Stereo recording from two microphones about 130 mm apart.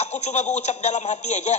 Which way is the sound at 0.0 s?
60° left (ahead or behind).